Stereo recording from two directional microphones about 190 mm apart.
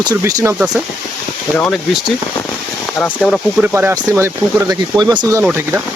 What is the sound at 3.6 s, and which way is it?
Speech, 10° right (ahead or behind).